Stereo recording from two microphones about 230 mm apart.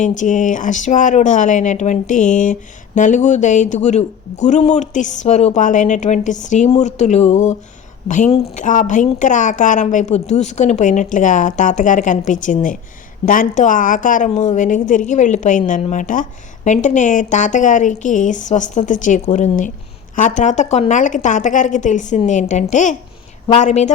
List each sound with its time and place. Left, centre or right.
0.0 s speech: left